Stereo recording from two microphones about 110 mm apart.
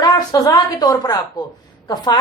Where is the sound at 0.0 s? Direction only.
35° left (ahead or behind).